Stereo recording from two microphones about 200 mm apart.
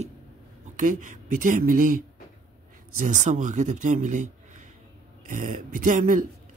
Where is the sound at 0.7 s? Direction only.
40° right (ahead or behind).